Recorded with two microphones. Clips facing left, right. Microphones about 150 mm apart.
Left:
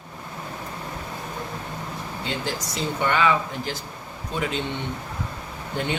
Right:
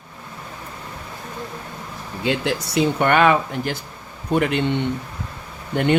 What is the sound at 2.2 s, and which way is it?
Speech, 70° right (ahead or behind).